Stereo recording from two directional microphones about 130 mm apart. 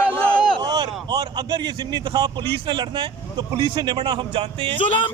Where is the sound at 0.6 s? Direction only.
30° right (ahead or behind).